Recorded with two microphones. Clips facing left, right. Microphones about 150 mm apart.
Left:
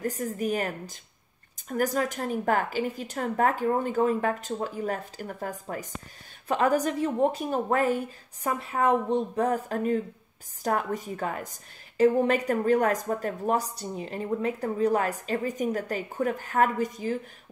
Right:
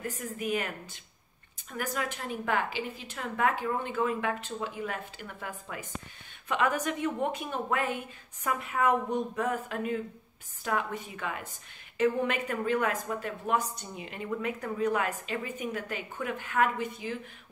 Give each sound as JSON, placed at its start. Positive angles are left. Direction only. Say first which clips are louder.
{"t": 0.0, "sound": "speech", "louder": "left 6 dB", "side_deg": 40}